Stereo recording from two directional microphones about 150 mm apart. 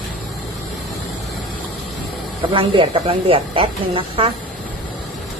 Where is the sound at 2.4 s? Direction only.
35° right (ahead or behind).